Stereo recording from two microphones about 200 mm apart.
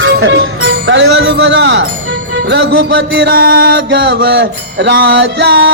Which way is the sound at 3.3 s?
50° right (ahead or behind).